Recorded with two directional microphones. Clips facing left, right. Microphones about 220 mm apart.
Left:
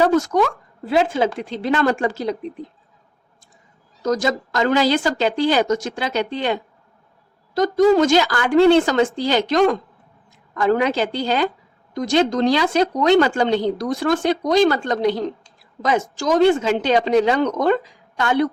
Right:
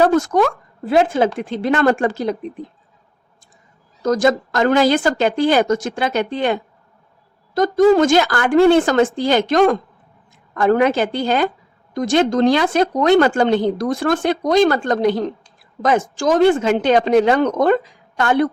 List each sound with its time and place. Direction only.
0.0 s speech: 50° right (ahead or behind)
4.0 s speech: 55° right (ahead or behind)